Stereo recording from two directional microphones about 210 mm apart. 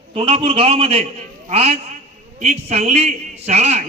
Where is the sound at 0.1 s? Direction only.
25° right (ahead or behind).